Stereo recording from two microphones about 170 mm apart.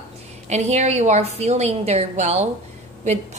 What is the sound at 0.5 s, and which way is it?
A woman's voice, 40° right (ahead or behind).